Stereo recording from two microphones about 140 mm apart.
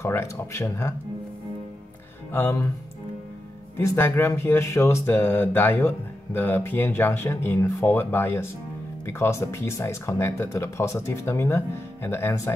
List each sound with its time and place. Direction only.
0.0 s speech: 20° left (ahead or behind)
2.3 s speech: 20° left (ahead or behind)
3.7 s speech: 15° left (ahead or behind)